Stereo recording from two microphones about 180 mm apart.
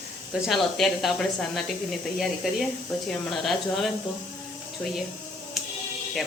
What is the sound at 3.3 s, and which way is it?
Speech, centre (ahead or behind).